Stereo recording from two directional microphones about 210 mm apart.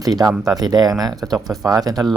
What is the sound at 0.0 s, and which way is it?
Speech, 20° right (ahead or behind).